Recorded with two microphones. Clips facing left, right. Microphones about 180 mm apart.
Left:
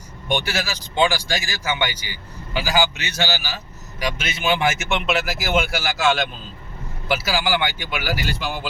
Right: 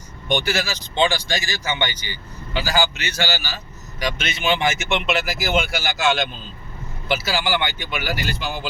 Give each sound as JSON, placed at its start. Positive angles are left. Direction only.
{"t": 0.3, "sound": "speech", "side_deg": 5}